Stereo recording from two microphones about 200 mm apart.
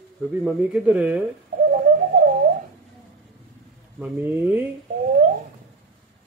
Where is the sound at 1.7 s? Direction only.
45° right (ahead or behind).